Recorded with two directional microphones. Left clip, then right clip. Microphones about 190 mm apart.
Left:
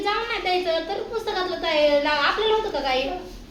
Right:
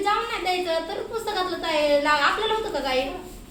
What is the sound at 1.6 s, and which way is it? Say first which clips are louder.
A woman's voice: left 2 dB; 5° right (ahead or behind).